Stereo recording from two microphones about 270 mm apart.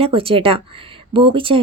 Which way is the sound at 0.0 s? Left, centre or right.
Centre.